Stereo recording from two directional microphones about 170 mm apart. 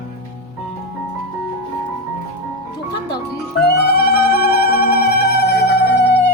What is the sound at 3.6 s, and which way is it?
Cat, 70° left (ahead or behind).